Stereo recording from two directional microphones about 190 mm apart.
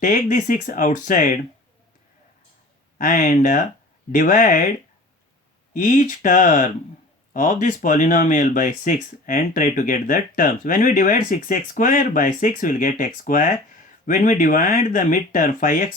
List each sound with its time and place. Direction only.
0.0 s speech: 45° left (ahead or behind)
3.0 s speech: 45° left (ahead or behind)
5.7 s speech: 45° left (ahead or behind)